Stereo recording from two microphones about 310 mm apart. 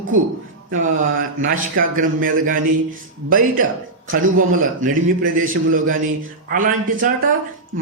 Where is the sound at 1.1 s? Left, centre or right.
Right.